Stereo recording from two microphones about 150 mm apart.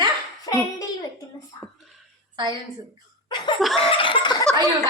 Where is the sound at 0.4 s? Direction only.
20° left (ahead or behind).